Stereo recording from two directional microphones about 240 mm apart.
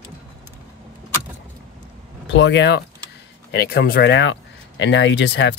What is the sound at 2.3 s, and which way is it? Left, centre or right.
Speech, left.